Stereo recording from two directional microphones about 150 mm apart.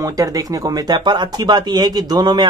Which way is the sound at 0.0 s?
25° right (ahead or behind).